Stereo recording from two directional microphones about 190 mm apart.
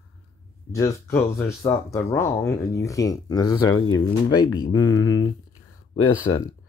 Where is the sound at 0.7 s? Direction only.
15° left (ahead or behind).